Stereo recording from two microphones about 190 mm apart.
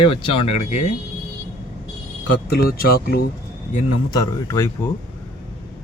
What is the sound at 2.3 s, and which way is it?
Speech, 55° left (ahead or behind).